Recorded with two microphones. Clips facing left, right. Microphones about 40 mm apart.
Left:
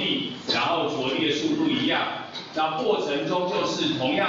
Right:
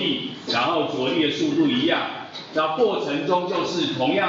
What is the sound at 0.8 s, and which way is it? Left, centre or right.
A man's voice, right.